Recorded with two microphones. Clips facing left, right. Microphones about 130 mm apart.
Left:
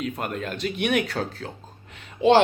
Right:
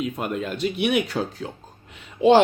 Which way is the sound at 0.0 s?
5° right (ahead or behind).